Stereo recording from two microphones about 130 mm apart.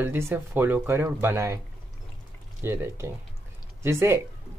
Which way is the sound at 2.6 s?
20° right (ahead or behind).